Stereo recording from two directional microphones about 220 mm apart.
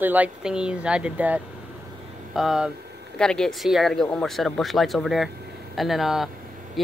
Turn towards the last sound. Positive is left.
turn(degrees=0)  # may be behind; listen again after turning